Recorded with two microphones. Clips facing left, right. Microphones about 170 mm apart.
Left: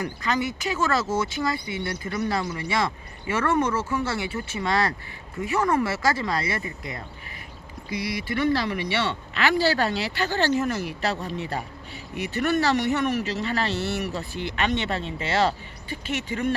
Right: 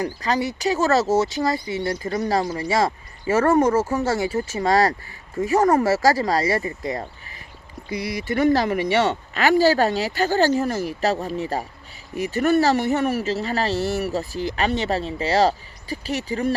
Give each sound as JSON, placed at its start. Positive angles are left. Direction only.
{"t": 0.0, "sound": "speech", "side_deg": -35}
{"t": 8.2, "sound": "speech", "side_deg": -45}